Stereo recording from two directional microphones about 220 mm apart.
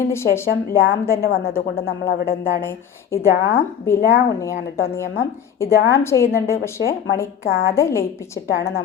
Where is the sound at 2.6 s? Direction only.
10° left (ahead or behind).